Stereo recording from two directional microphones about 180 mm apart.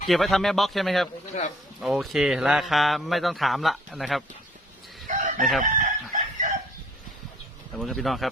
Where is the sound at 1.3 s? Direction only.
40° left (ahead or behind).